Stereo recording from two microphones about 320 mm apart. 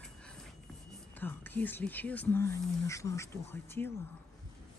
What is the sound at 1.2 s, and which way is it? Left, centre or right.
Speech, centre.